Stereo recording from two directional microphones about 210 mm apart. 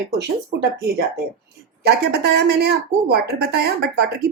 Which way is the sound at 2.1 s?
50° right (ahead or behind).